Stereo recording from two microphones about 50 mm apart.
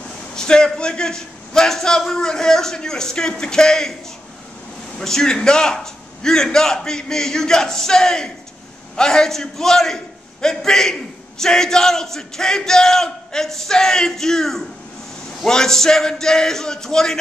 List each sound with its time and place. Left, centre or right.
0.4 s a sound: centre
0.7 s a man's voice: centre
5.0 s a man's voice: centre